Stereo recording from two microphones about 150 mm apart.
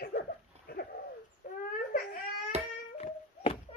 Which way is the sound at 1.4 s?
70° left (ahead or behind).